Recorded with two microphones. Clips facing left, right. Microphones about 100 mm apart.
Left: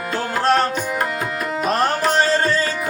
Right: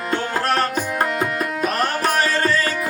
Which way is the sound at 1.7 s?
30° left (ahead or behind).